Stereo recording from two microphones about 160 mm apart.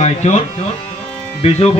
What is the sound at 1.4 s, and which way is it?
Speech, 35° left (ahead or behind).